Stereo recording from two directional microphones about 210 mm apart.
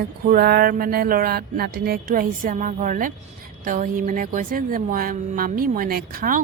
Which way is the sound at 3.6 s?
40° right (ahead or behind).